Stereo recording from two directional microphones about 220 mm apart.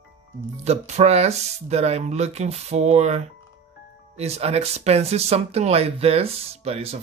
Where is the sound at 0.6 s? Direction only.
30° right (ahead or behind).